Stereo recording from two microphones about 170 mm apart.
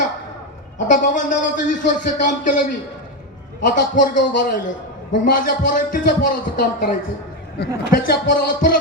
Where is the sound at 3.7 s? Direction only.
55° left (ahead or behind).